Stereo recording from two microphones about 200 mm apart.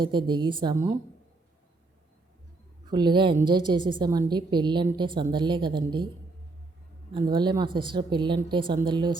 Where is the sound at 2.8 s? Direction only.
20° right (ahead or behind).